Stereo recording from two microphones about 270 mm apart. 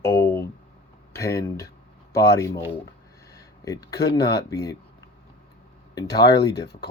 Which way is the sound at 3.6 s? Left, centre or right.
Centre.